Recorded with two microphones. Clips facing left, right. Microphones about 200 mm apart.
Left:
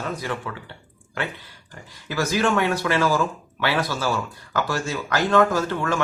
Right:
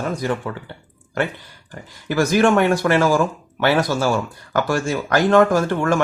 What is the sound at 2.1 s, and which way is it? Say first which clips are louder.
Speech: right 6 dB; 50° right (ahead or behind).